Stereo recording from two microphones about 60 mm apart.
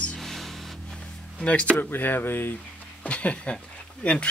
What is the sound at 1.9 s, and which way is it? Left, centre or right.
Speech, left.